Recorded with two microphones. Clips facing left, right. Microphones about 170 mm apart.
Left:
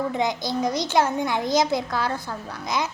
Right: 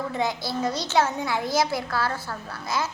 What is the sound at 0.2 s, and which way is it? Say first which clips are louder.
A child's voice: left 2 dB; 20° left (ahead or behind).